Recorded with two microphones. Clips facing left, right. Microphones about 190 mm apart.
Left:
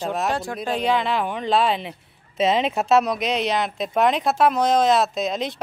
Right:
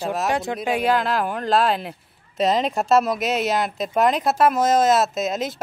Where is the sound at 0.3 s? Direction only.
20° right (ahead or behind).